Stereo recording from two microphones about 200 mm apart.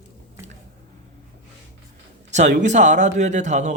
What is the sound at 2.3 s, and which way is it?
Speech, 35° right (ahead or behind).